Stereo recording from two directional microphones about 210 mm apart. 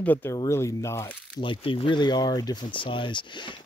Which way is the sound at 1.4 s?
25° left (ahead or behind).